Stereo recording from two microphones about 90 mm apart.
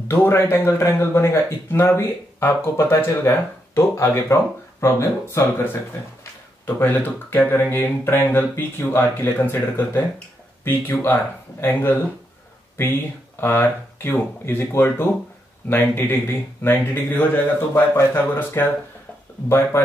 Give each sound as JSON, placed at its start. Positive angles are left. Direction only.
{"t": 0.1, "sound": "speech", "side_deg": 30}
{"t": 13.4, "sound": "speech", "side_deg": 25}
{"t": 19.7, "sound": "speech", "side_deg": 25}